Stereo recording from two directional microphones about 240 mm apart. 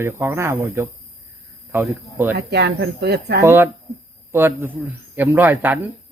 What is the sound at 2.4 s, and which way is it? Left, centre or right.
Speech, right.